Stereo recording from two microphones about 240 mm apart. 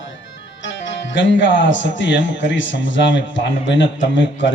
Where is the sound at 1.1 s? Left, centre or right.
Left.